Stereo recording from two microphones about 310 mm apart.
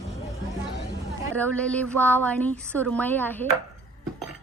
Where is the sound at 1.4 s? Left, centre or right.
Centre.